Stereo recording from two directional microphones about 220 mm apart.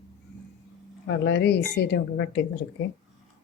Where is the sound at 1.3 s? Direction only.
50° left (ahead or behind).